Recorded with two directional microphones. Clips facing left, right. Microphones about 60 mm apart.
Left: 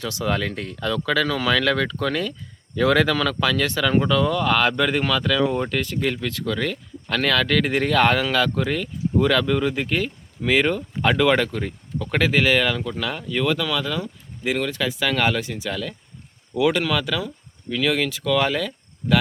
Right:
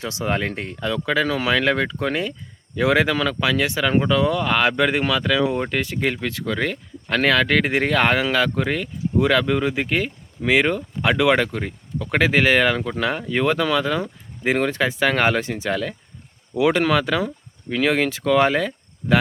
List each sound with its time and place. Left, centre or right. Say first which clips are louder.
0.0 s speech: right 1 dB; right
11.4 s speech: even; right